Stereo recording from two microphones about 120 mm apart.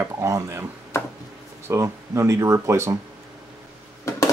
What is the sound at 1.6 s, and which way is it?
Speech, 25° right (ahead or behind).